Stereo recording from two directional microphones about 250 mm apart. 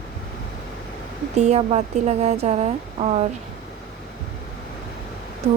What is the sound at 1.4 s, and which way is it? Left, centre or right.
Speech, right.